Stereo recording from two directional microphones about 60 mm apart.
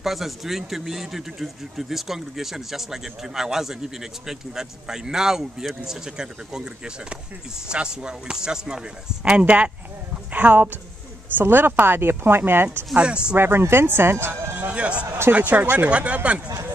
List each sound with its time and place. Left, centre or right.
0.0 s speech: centre; by 12.6 s right
12.9 s speech: centre
13.4 s speech: right
14.5 s a sound: right
14.8 s speech: centre
15.3 s speech: right